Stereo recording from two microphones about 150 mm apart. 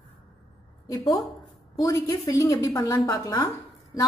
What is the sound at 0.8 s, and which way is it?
A woman's voice, 25° left (ahead or behind).